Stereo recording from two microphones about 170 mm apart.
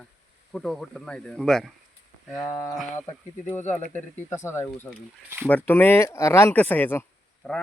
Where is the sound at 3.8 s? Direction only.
15° left (ahead or behind).